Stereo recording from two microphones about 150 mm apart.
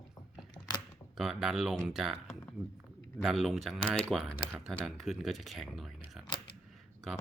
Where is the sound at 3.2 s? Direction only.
Centre (ahead or behind).